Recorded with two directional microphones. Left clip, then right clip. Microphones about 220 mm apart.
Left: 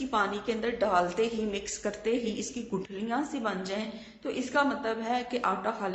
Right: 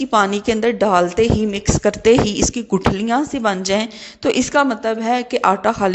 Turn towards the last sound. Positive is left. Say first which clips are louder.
# right 14 dB
turn(degrees=-45)  # may be behind; listen again after turning